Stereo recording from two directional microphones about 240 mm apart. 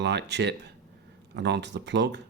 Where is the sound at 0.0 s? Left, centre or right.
Right.